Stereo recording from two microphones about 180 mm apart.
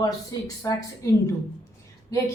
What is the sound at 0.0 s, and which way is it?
Speech, 20° left (ahead or behind).